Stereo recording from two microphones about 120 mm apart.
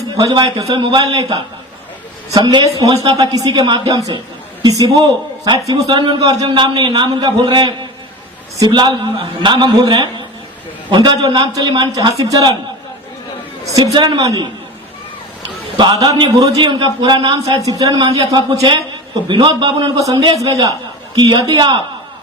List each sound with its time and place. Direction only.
0.2 s a man's voice: 35° right (ahead or behind)
13.9 s a man's voice: 40° right (ahead or behind)
15.8 s a man's voice: 40° right (ahead or behind)
20.0 s a man's voice: 30° right (ahead or behind)